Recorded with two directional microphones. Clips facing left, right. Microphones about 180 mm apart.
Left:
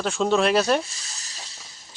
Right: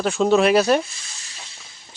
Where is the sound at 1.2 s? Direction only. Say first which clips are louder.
Right 1 dB; 40° left (ahead or behind).